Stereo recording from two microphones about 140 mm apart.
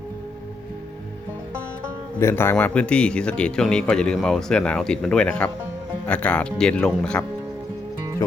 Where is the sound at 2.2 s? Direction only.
15° left (ahead or behind).